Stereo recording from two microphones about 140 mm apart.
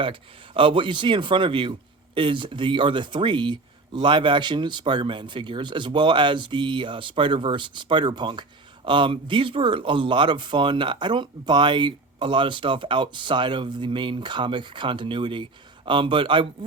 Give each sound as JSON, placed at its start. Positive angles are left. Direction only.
{"t": 0.0, "sound": "speech", "side_deg": -40}